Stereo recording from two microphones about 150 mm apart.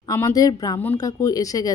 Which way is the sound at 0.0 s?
20° left (ahead or behind).